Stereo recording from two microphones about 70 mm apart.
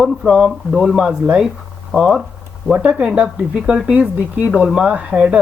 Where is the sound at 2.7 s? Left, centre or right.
Centre.